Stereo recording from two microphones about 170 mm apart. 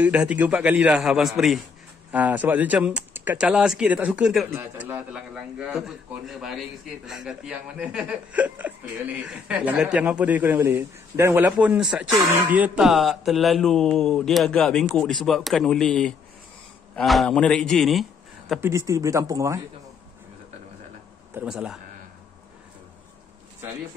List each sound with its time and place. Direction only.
0.0 s mantra: 10° right (ahead or behind)
2.0 s a man's voice: 10° right (ahead or behind)
11.6 s mantra: 5° right (ahead or behind)
18.6 s speech: 15° right (ahead or behind)
21.4 s mantra: 5° right (ahead or behind)